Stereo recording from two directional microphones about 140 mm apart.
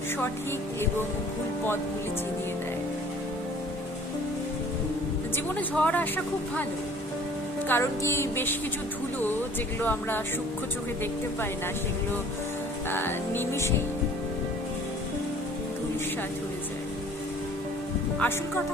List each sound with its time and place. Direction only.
5.5 s speech: 10° left (ahead or behind)
7.7 s speech: 20° left (ahead or behind)
9.8 s speech: 10° left (ahead or behind)
12.9 s speech: 15° left (ahead or behind)
18.2 s speech: 15° left (ahead or behind)